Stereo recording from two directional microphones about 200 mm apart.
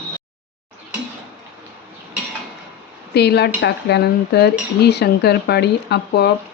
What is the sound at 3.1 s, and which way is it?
Speech, 55° left (ahead or behind).